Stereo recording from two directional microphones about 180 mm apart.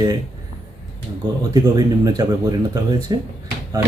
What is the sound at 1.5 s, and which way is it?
Speech, 20° right (ahead or behind).